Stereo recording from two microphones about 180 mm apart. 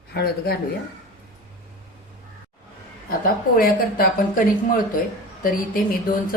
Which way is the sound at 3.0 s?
55° left (ahead or behind).